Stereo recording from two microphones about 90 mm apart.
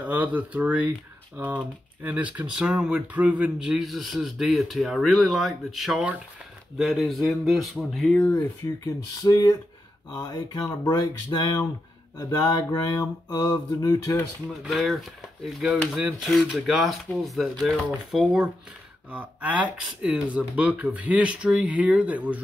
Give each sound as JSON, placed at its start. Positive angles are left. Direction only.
{"t": 0.0, "sound": "speech", "side_deg": -20}
{"t": 8.6, "sound": "a sound", "side_deg": 40}
{"t": 14.6, "sound": "speech", "side_deg": 0}